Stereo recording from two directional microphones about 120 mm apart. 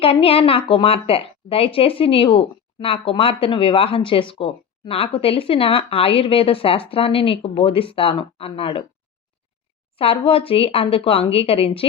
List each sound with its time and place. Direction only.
0.0 s a woman's voice: 50° left (ahead or behind)
10.0 s a woman's voice: 50° left (ahead or behind)